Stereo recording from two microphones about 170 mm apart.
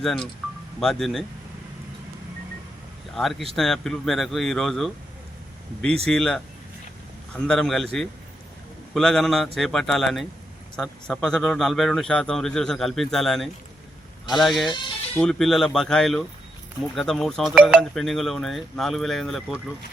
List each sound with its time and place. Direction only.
0.0 s a man's voice: 5° left (ahead or behind)
3.2 s a man's voice: centre (ahead or behind)
6.1 s a man's voice: centre (ahead or behind)
7.4 s a man's voice: 5° left (ahead or behind)
9.0 s a man's voice: centre (ahead or behind)
14.7 s music: 30° left (ahead or behind)
15.2 s a man's voice: 5° left (ahead or behind)